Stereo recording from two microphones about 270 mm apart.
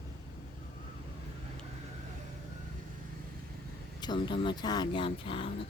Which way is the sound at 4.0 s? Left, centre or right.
Centre.